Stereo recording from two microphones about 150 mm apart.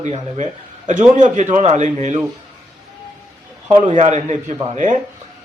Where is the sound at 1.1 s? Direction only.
55° right (ahead or behind).